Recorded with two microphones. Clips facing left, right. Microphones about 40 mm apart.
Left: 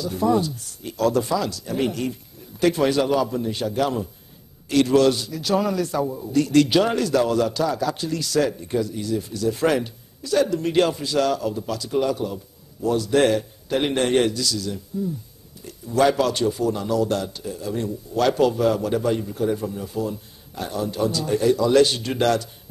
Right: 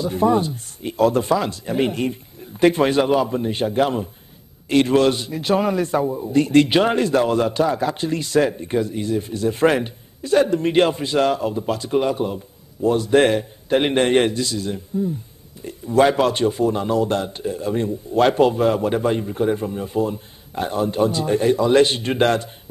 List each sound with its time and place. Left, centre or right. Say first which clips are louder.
0.0 s a man's voice: right 3 dB; right